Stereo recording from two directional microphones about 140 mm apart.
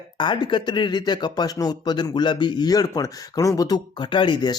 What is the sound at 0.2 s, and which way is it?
Speech, 35° left (ahead or behind).